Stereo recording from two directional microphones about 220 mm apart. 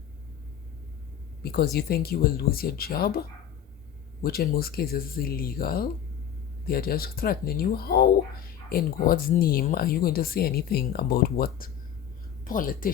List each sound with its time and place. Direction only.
1.4 s a woman's voice: 45° left (ahead or behind)